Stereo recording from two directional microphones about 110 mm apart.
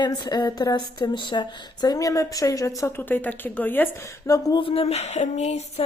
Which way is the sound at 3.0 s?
15° left (ahead or behind).